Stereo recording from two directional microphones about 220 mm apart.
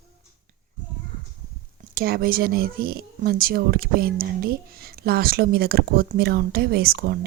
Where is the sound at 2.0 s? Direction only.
45° right (ahead or behind).